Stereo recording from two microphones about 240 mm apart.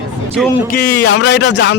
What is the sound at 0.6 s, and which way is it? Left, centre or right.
Speech, left.